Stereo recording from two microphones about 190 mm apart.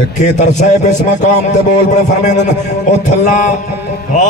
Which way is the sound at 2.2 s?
40° left (ahead or behind).